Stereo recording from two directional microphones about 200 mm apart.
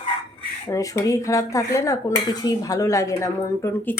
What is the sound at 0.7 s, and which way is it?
Speech, 15° left (ahead or behind).